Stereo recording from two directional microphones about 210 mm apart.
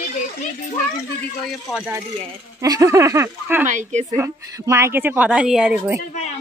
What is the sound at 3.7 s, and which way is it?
Speech, 35° right (ahead or behind).